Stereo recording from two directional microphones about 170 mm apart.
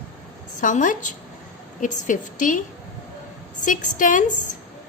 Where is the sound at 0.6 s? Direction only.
50° left (ahead or behind).